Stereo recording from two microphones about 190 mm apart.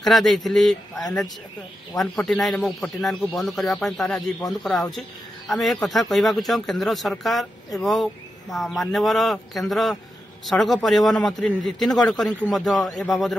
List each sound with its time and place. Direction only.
0.0 s speech: centre (ahead or behind)
5.5 s speech: centre (ahead or behind)